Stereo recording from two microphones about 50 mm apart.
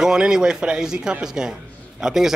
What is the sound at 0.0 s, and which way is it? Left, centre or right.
Speech, centre.